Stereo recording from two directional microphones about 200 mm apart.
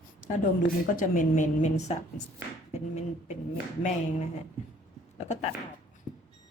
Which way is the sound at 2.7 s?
35° left (ahead or behind).